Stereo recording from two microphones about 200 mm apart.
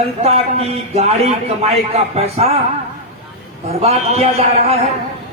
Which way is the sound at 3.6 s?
30° right (ahead or behind).